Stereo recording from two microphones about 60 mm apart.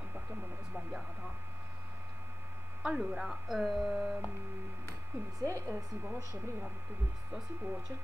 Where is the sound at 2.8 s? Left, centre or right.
Centre.